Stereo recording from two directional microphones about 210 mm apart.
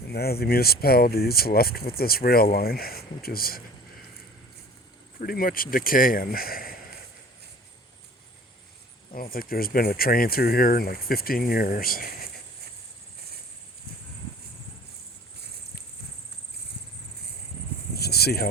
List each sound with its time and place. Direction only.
0.1 s speech: 50° left (ahead or behind)
5.2 s speech: 45° left (ahead or behind)
9.3 s speech: 45° left (ahead or behind)
17.9 s a sound: 50° left (ahead or behind)